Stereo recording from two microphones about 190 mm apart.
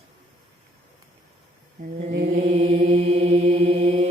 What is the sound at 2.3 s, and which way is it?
Mantra, 35° right (ahead or behind).